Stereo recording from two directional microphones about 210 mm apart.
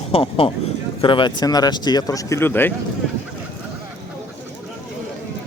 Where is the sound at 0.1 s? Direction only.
25° left (ahead or behind); by 2.7 s 10° left (ahead or behind).